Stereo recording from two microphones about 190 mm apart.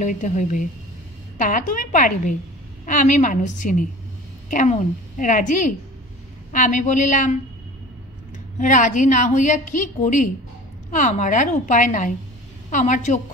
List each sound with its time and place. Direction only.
0.0 s a woman's voice: 40° left (ahead or behind)
8.5 s a woman's voice: 40° left (ahead or behind)